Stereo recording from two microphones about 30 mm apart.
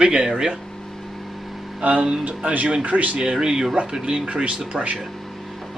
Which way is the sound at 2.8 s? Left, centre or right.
Right.